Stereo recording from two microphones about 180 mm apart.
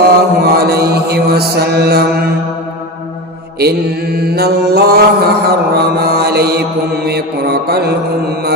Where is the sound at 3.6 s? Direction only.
60° right (ahead or behind).